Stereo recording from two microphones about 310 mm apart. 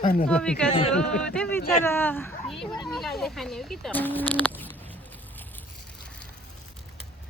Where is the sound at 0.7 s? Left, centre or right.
Left.